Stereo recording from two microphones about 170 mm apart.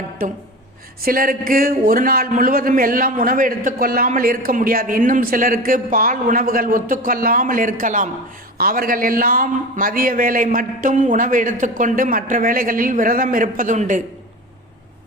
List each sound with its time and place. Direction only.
0.2 s a man's voice: 55° right (ahead or behind)